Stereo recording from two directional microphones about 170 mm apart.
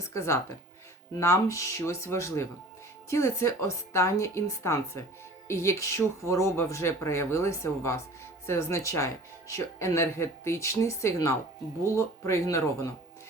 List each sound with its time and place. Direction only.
0.0 s speech: 15° left (ahead or behind)